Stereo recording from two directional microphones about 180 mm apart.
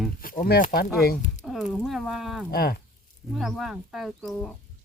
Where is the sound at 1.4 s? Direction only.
Centre (ahead or behind).